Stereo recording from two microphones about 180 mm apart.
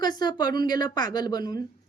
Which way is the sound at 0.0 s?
25° left (ahead or behind).